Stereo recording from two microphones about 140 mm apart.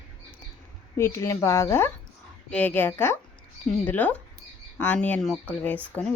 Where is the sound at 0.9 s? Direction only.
20° left (ahead or behind).